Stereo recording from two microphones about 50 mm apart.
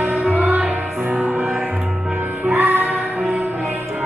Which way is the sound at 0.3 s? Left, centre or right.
Right.